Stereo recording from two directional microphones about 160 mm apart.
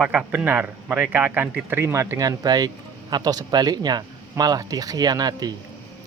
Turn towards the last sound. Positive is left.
turn(degrees=-25)  # may be behind; listen again after turning